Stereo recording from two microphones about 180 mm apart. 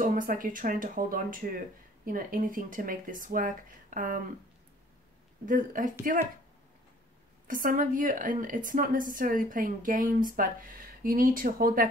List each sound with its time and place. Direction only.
0.0 s a woman's voice: 50° right (ahead or behind)
5.4 s a woman's voice: 50° right (ahead or behind)
7.4 s a woman's voice: 50° right (ahead or behind)